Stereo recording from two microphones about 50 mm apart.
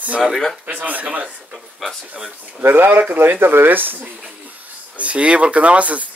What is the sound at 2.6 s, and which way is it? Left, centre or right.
Speech, right.